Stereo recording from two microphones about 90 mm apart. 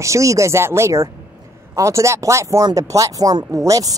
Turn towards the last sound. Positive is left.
turn(degrees=-40)  # may be behind; listen again after turning